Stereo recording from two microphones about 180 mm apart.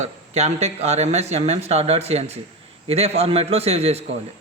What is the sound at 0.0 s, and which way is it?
Speech, 35° right (ahead or behind).